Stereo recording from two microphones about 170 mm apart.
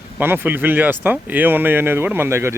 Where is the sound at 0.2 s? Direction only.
10° right (ahead or behind).